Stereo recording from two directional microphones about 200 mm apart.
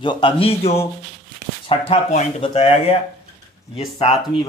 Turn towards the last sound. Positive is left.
turn(degrees=25)  # may be behind; listen again after turning